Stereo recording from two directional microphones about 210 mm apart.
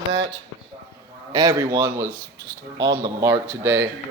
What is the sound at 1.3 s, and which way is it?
A man's voice, 15° right (ahead or behind).